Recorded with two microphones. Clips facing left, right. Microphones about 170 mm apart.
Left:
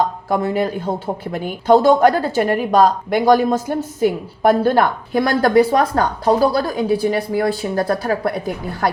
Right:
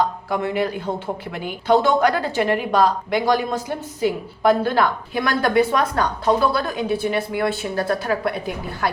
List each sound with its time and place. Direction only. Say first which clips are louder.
0.3 s a woman's voice: left 3 dB; 45° left (ahead or behind)